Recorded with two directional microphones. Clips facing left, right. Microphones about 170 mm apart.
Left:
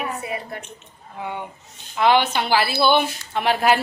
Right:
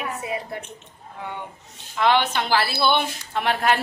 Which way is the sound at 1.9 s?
5° left (ahead or behind).